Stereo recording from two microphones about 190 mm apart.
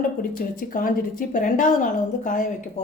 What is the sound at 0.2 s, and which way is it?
A woman's voice, 45° left (ahead or behind).